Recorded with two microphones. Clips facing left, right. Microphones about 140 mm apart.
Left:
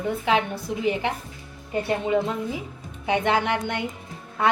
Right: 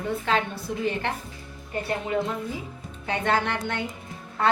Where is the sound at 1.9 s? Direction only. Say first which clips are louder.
Left 3 dB; 20° left (ahead or behind).